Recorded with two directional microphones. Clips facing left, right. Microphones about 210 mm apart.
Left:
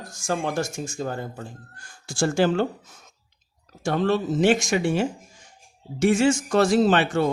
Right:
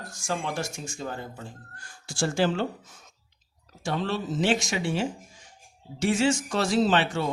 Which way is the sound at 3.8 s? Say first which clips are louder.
Left 6 dB; 50° left (ahead or behind).